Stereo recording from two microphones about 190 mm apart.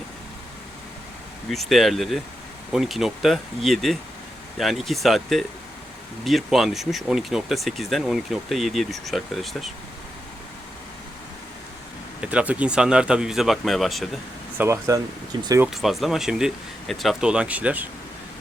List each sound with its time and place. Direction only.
1.5 s speech: centre (ahead or behind)
12.2 s speech: 5° right (ahead or behind)
14.6 s speech: 15° right (ahead or behind)
15.7 s speech: centre (ahead or behind)